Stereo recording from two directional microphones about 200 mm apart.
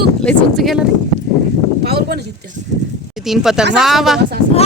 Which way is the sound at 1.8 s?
50° right (ahead or behind).